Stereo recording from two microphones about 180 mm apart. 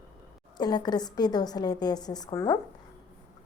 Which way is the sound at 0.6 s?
25° left (ahead or behind).